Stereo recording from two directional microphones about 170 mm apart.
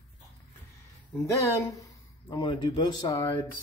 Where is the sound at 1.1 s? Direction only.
15° left (ahead or behind).